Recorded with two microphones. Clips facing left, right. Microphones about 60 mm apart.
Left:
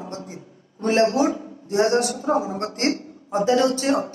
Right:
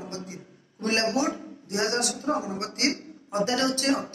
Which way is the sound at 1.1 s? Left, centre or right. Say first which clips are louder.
Left 5 dB; left.